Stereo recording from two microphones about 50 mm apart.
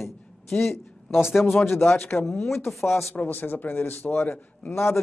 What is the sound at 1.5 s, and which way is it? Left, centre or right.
Speech, left.